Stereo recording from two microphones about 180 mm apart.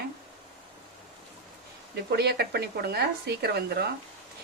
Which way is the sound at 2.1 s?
60° right (ahead or behind).